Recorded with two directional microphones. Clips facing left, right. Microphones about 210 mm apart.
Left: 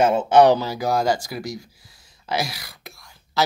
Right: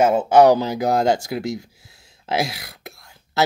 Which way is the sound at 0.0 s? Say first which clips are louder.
Right 1 dB; 5° right (ahead or behind).